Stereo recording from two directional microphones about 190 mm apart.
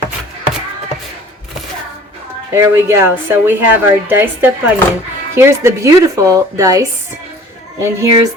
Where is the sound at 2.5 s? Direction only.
15° right (ahead or behind).